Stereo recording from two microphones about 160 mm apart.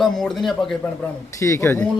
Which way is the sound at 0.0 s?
Centre (ahead or behind).